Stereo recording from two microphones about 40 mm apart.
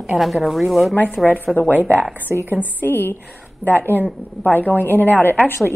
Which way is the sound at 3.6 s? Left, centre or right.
Left.